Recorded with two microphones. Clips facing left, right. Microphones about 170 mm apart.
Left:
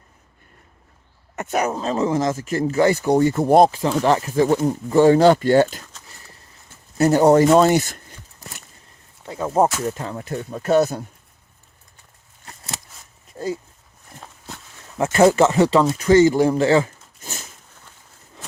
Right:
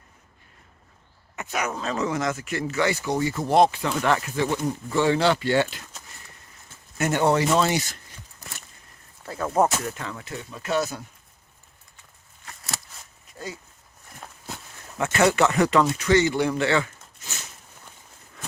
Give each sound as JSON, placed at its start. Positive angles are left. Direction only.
{"t": 1.4, "sound": "speech", "side_deg": 45}
{"t": 6.9, "sound": "speech", "side_deg": 35}
{"t": 9.2, "sound": "speech", "side_deg": 20}
{"t": 9.8, "sound": "speech", "side_deg": 35}
{"t": 12.5, "sound": "a sound", "side_deg": 25}
{"t": 14.9, "sound": "speech", "side_deg": 35}
{"t": 16.1, "sound": "a sound", "side_deg": 40}